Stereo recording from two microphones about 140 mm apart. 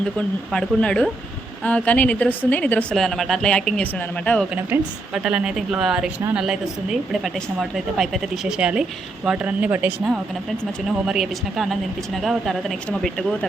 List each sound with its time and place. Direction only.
0.0 s a woman's voice: 5° left (ahead or behind)
2.9 s speech: centre (ahead or behind)
4.7 s speech: 15° right (ahead or behind)
5.1 s speech: 5° right (ahead or behind)
11.0 s speech: 5° right (ahead or behind)